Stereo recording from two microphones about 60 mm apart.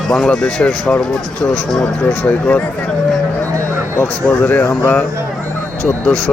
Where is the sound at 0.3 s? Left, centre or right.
Centre.